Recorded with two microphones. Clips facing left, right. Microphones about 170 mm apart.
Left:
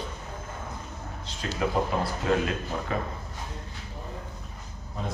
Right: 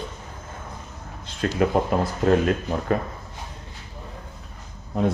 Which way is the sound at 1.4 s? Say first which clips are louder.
Right 9 dB; 55° right (ahead or behind).